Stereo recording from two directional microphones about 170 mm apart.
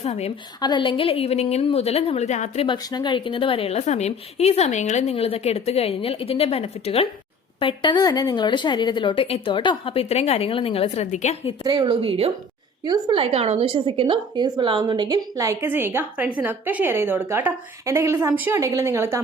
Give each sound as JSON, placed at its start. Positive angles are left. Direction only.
{"t": 0.0, "sound": "a woman's voice", "side_deg": 35}
{"t": 0.6, "sound": "a woman's voice", "side_deg": 25}
{"t": 2.6, "sound": "a woman's voice", "side_deg": 25}
{"t": 11.6, "sound": "speech", "side_deg": -25}
{"t": 12.8, "sound": "a woman's voice", "side_deg": -25}